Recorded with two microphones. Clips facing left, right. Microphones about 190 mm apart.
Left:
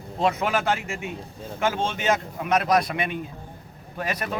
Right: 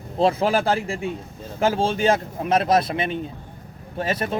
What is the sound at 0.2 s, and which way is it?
A man's voice, 30° right (ahead or behind).